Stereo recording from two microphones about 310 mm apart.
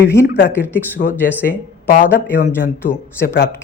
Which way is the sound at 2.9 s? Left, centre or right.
Left.